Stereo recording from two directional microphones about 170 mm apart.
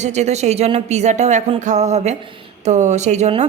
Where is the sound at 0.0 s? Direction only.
40° right (ahead or behind).